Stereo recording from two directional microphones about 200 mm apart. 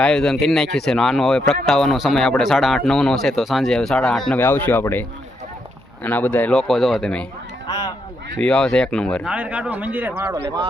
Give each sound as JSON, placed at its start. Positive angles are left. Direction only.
{"t": 0.0, "sound": "speech", "side_deg": 0}
{"t": 8.4, "sound": "speech", "side_deg": 5}
{"t": 10.3, "sound": "speech", "side_deg": -25}